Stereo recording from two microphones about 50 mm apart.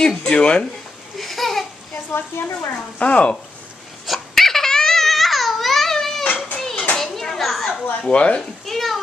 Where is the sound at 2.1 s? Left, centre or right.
Left.